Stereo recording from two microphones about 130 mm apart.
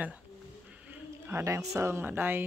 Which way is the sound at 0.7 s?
10° right (ahead or behind).